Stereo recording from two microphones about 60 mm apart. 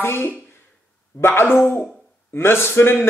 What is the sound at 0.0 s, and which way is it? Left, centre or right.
A woman's voice, left.